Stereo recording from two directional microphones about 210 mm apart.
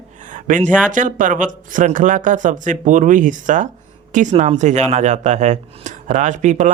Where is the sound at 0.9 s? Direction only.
40° right (ahead or behind).